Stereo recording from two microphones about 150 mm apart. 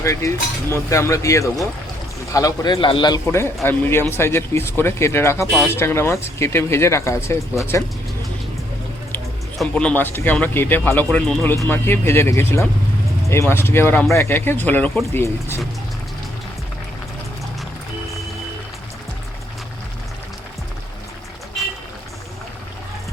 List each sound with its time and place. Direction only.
0.0 s speech: 20° left (ahead or behind)
3.2 s speech: 15° left (ahead or behind)
9.6 s speech: 10° left (ahead or behind)
11.5 s speech: 15° left (ahead or behind)